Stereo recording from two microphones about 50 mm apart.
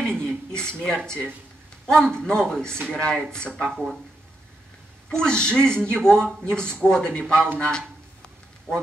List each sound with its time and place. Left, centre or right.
0.0 s speech: centre
3.6 s speech: centre
5.1 s a man's voice: centre